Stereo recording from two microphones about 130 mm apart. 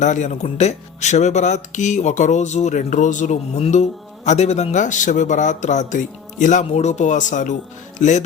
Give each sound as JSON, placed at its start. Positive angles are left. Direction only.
{"t": 0.0, "sound": "speech", "side_deg": 65}